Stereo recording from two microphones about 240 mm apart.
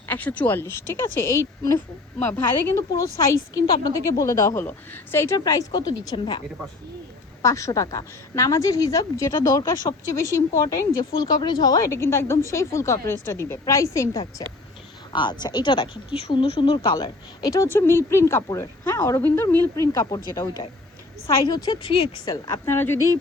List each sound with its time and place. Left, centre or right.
0.1 s speech: centre
7.4 s speech: centre